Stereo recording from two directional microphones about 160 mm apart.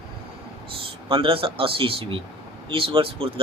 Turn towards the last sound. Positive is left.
turn(degrees=-35)  # may be behind; listen again after turning